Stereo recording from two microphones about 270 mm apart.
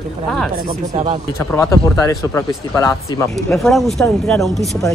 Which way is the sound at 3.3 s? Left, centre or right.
Centre.